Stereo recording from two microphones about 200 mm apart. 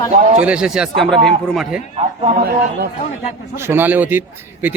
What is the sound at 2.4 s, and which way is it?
Speech, 50° right (ahead or behind).